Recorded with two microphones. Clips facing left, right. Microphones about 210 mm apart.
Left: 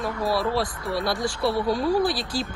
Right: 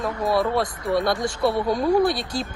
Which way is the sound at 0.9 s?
20° right (ahead or behind).